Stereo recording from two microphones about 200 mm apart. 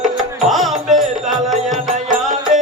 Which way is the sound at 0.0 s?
Centre (ahead or behind).